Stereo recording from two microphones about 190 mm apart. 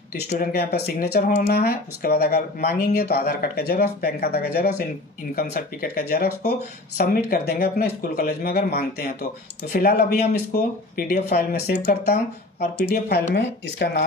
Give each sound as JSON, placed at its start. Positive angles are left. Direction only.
{"t": 0.3, "sound": "speech", "side_deg": 50}